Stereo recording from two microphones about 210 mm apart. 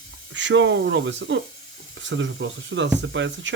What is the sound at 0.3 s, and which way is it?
Speech, 60° right (ahead or behind).